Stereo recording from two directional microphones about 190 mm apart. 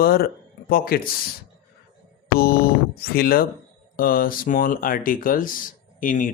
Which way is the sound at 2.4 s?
55° left (ahead or behind).